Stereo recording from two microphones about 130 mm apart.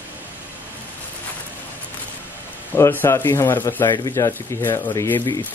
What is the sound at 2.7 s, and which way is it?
Speech, 15° left (ahead or behind).